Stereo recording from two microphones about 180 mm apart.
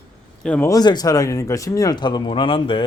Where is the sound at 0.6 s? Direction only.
20° left (ahead or behind).